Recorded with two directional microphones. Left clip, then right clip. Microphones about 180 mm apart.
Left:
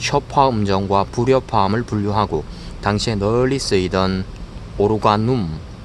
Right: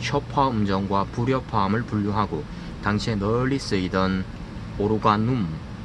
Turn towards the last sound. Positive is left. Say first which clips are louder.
# left 5 dB
turn(degrees=60)  # may be behind; listen again after turning